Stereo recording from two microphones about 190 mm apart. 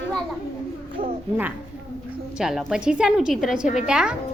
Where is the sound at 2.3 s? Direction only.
5° right (ahead or behind).